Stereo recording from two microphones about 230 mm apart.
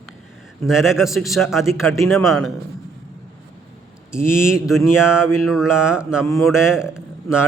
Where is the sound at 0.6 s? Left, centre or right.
Centre.